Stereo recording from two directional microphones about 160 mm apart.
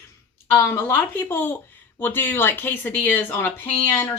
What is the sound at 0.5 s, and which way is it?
Speech, 15° left (ahead or behind).